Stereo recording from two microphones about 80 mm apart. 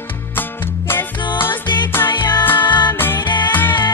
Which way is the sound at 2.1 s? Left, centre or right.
Left.